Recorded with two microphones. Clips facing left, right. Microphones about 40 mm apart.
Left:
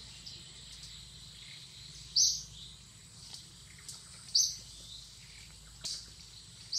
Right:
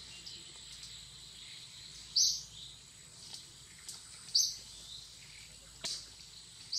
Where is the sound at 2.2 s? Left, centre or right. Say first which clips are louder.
Left 1 dB; centre.